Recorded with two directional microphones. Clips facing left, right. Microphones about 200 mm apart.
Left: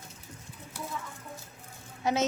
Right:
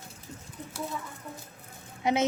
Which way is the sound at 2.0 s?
20° right (ahead or behind).